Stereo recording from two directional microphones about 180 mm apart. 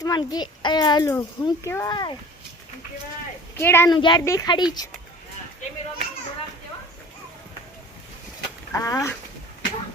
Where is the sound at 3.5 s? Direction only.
15° left (ahead or behind).